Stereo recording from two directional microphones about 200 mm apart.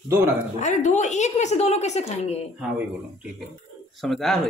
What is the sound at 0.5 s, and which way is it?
Speech, 35° left (ahead or behind).